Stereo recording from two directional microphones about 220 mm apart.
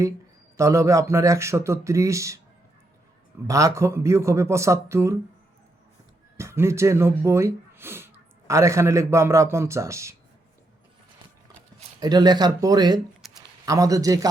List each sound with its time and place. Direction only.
0.5 s a man's voice: 15° right (ahead or behind)
3.4 s a man's voice: 15° right (ahead or behind)
6.3 s speech: 10° right (ahead or behind)
11.9 s a man's voice: 20° right (ahead or behind)
13.2 s a sound: centre (ahead or behind)
13.7 s a man's voice: 15° right (ahead or behind)